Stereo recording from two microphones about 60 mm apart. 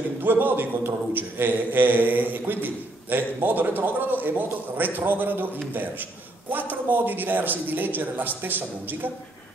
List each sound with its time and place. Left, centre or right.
0.2 s a man's voice: right
6.5 s a man's voice: right